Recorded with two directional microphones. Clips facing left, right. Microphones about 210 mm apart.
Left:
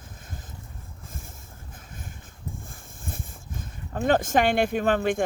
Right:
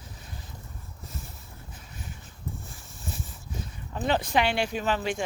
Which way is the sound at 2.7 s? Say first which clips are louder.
Left 1 dB; 50° left (ahead or behind).